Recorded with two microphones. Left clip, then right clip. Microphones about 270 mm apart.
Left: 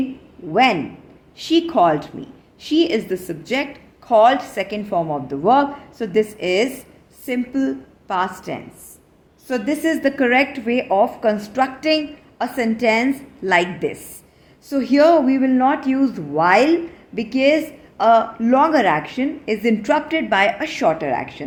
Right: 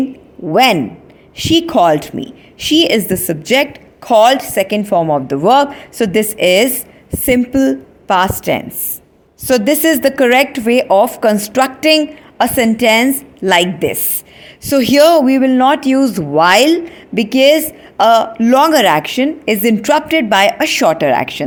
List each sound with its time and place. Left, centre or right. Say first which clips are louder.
0.5 s speech: right 6 dB; right